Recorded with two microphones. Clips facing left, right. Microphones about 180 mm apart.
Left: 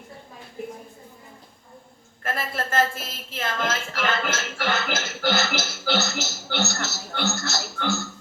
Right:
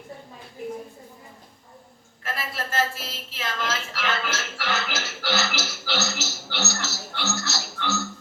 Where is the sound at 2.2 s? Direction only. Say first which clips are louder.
Left 3 dB; 50° left (ahead or behind).